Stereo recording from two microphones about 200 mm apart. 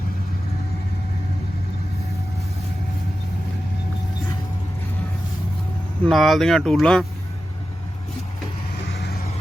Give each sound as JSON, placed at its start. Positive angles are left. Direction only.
{"t": 6.1, "sound": "speech", "side_deg": 0}
{"t": 8.9, "sound": "vehicle", "side_deg": 50}